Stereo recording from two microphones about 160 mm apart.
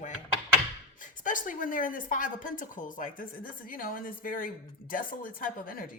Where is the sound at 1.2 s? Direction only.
55° left (ahead or behind).